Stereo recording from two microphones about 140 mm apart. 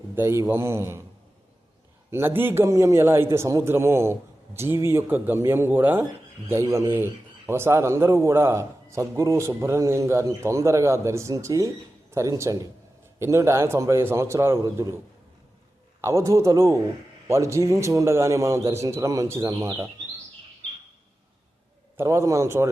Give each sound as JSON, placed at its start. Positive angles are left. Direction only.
{"t": 0.2, "sound": "speech", "side_deg": -15}
{"t": 2.0, "sound": "a man's voice", "side_deg": -15}
{"t": 16.0, "sound": "speech", "side_deg": -20}
{"t": 21.9, "sound": "speech", "side_deg": -20}